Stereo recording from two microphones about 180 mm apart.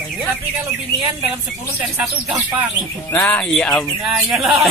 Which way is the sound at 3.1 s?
10° left (ahead or behind).